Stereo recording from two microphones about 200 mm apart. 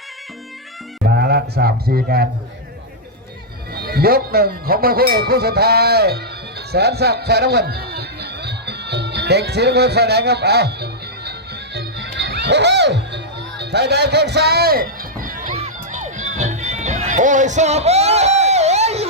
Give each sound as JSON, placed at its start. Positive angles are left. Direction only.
{"t": 1.0, "sound": "a sound", "side_deg": -55}
{"t": 3.8, "sound": "speech", "side_deg": -50}
{"t": 11.3, "sound": "music", "side_deg": -55}